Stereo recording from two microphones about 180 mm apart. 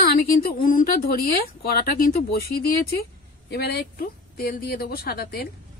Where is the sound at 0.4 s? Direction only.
55° left (ahead or behind).